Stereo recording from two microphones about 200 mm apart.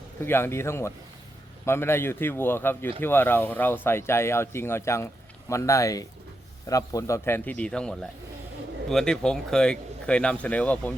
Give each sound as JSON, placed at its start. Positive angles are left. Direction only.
{"t": 0.2, "sound": "speech", "side_deg": 10}